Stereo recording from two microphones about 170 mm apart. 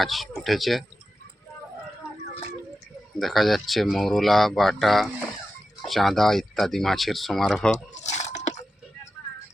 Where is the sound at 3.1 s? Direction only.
Centre (ahead or behind).